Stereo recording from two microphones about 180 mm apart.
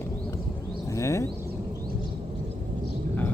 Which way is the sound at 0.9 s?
15° left (ahead or behind).